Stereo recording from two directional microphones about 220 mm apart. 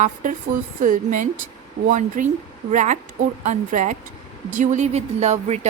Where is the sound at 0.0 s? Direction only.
35° right (ahead or behind).